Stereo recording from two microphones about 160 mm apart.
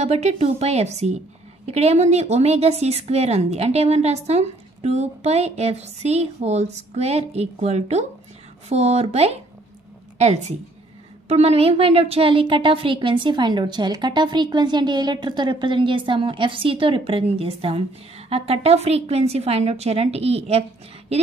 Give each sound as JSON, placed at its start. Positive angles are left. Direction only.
{"t": 0.0, "sound": "a woman's voice", "side_deg": -40}